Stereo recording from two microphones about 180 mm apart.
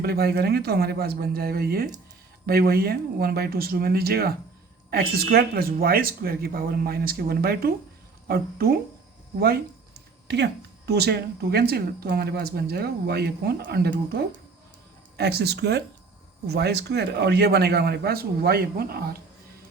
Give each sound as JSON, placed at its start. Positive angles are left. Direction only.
{"t": 0.0, "sound": "speech", "side_deg": -60}
{"t": 10.2, "sound": "speech", "side_deg": -70}